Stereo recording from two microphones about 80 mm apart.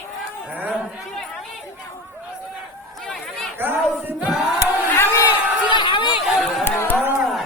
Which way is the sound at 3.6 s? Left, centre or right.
Right.